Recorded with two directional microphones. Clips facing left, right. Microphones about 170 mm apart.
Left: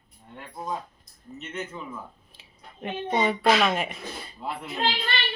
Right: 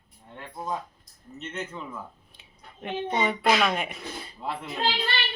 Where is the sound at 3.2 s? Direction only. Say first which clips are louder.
Left 2 dB; centre (ahead or behind).